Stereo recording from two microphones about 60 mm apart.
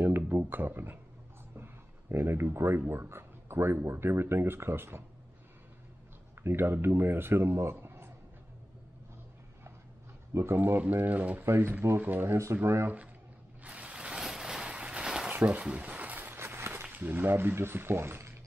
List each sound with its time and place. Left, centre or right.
0.0 s a sound: right
2.9 s speech: right
6.4 s speech: right
10.3 s speech: right
11.4 s speech: right
13.7 s a sound: right
16.8 s speech: right